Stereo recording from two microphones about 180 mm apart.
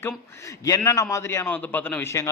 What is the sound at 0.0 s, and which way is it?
A man's voice, 20° left (ahead or behind).